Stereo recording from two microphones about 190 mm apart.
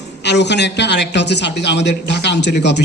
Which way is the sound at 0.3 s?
65° left (ahead or behind).